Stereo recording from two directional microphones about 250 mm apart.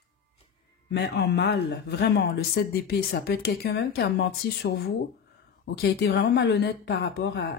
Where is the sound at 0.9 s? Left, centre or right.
Left.